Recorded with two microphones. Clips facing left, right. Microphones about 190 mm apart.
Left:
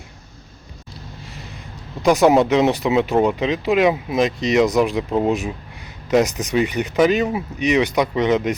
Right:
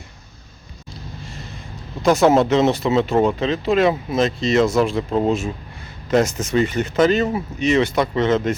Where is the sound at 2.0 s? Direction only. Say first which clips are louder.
Left 1 dB; 15° left (ahead or behind).